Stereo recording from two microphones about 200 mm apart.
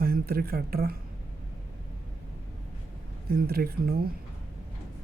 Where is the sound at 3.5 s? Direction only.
50° right (ahead or behind).